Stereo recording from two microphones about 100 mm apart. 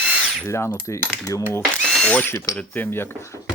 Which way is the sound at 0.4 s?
25° left (ahead or behind).